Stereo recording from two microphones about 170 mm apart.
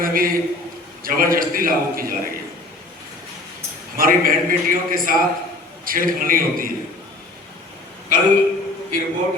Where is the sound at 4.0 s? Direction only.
55° right (ahead or behind).